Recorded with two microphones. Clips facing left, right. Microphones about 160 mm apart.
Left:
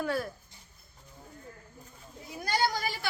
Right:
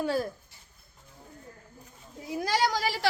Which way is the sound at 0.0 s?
30° right (ahead or behind).